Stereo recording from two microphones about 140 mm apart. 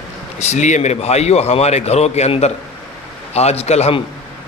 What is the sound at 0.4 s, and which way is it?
A man's voice, 55° left (ahead or behind).